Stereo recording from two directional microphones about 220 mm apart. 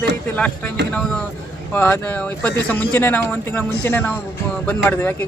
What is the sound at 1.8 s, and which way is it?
Speech, 10° left (ahead or behind).